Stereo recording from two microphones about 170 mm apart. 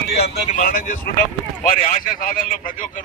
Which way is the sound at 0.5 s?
55° left (ahead or behind).